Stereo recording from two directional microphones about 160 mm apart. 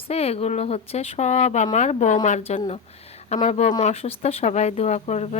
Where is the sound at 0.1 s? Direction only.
40° left (ahead or behind).